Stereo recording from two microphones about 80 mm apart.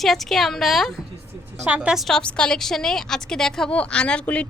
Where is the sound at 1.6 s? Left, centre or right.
Centre.